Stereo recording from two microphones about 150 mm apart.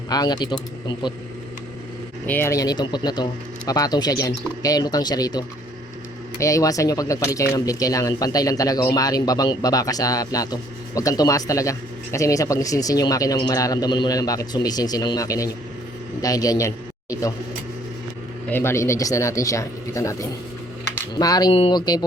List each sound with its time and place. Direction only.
0.1 s speech: 30° left (ahead or behind)
2.2 s a man's voice: 15° left (ahead or behind)
18.5 s speech: 15° left (ahead or behind)